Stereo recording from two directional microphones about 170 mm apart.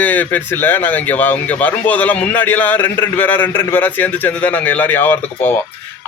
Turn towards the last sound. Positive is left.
turn(degrees=10)  # may be behind; listen again after turning